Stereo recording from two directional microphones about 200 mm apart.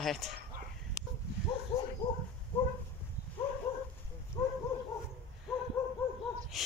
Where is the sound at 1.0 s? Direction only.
15° left (ahead or behind).